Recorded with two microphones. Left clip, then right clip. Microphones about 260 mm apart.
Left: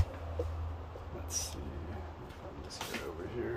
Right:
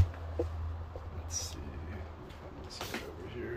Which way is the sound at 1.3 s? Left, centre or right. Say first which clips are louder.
Left 1 dB; centre.